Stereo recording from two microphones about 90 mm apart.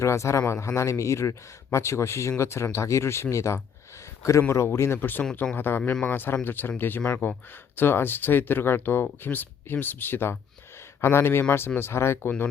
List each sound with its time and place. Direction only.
0.0 s a man's voice: 35° left (ahead or behind); by 7.3 s 15° left (ahead or behind)
7.8 s speech: 25° left (ahead or behind)